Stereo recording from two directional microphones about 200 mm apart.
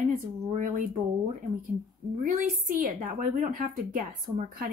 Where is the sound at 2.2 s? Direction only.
40° right (ahead or behind).